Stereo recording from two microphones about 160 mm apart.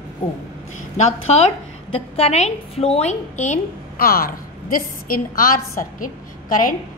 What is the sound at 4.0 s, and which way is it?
A woman's voice, 70° left (ahead or behind).